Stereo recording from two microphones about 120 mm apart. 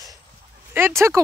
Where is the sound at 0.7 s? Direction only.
20° right (ahead or behind).